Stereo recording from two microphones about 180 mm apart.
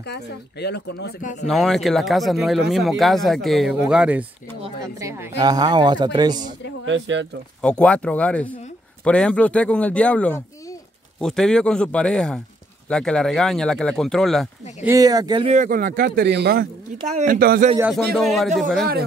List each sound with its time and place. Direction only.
0.0 s speech: 65° left (ahead or behind)
1.2 s speech: 40° left (ahead or behind)
1.5 s speech: centre (ahead or behind); by 6.4 s 25° right (ahead or behind)
6.9 s speech: 90° right
7.6 s speech: 5° left (ahead or behind)
14.9 s speech: 20° right (ahead or behind)
15.4 s speech: 45° right (ahead or behind); by 16.6 s 65° right (ahead or behind)
17.1 s speech: 45° right (ahead or behind)
17.9 s speech: centre (ahead or behind)